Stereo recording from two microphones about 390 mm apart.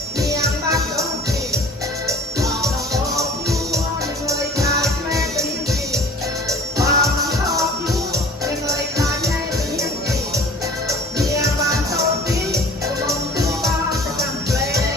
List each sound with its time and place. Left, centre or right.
0.2 s music: centre
2.0 s music: centre
4.3 s music: centre
6.5 s music: centre
8.6 s music: centre
10.8 s music: centre